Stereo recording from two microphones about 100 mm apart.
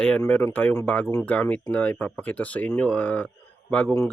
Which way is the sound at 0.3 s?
15° left (ahead or behind).